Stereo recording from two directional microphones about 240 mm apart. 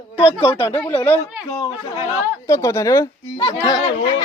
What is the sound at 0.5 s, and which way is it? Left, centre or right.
Speech, left.